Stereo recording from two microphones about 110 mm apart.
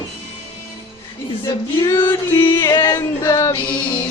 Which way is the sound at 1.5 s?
25° left (ahead or behind).